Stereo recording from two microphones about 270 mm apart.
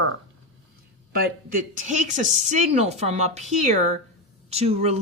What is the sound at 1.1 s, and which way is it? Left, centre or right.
Speech, right.